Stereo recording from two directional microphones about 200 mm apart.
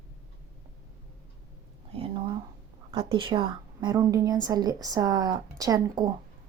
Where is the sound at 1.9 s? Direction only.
25° right (ahead or behind).